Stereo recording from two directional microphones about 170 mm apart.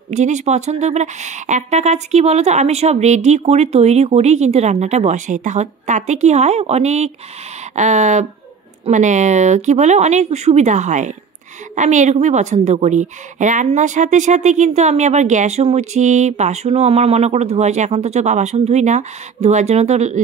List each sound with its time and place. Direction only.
0.1 s a woman's voice: 45° right (ahead or behind)